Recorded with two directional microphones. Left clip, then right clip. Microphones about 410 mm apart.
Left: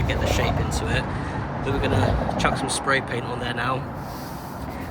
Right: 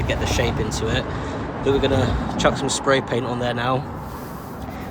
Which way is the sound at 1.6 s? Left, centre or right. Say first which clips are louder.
Right 5 dB; centre.